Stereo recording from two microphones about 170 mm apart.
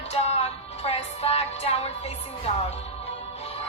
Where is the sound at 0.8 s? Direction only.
35° left (ahead or behind).